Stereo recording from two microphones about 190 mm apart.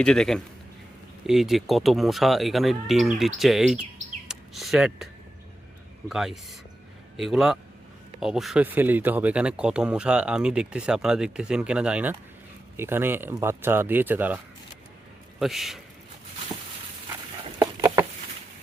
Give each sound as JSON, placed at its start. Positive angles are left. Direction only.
{"t": 0.0, "sound": "speech", "side_deg": 5}
{"t": 6.1, "sound": "speech", "side_deg": 0}
{"t": 17.6, "sound": "a sound", "side_deg": -15}